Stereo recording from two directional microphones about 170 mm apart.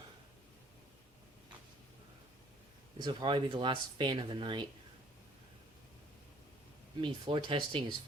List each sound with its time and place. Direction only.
3.0 s speech: 25° right (ahead or behind)
7.0 s speech: 30° right (ahead or behind)